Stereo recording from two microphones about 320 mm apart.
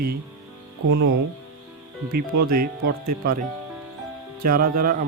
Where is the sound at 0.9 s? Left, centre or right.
Right.